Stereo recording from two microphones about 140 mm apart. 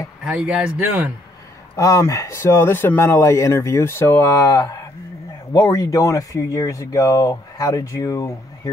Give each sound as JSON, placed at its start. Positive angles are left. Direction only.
{"t": 0.2, "sound": "speech", "side_deg": -5}
{"t": 1.8, "sound": "speech", "side_deg": 25}